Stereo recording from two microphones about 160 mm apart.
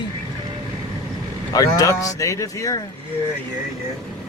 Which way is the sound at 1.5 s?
20° left (ahead or behind).